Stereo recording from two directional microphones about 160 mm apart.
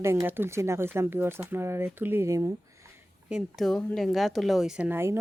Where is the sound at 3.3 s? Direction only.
5° right (ahead or behind).